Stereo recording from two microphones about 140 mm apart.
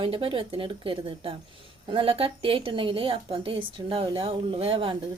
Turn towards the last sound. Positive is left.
turn(degrees=-40)  # may be behind; listen again after turning